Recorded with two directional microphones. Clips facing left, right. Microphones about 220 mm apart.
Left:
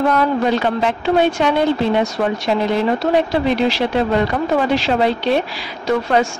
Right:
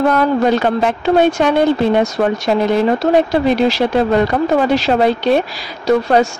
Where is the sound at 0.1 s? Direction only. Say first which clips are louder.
Right 3 dB; 45° right (ahead or behind).